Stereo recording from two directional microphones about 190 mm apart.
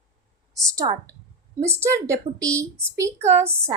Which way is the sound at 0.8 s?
25° right (ahead or behind).